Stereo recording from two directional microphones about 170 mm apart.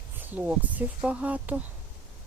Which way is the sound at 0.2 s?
10° right (ahead or behind).